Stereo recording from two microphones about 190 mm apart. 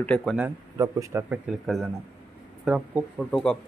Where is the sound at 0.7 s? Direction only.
15° right (ahead or behind).